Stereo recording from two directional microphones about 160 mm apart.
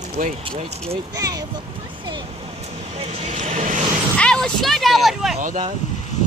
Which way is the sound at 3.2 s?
45° right (ahead or behind).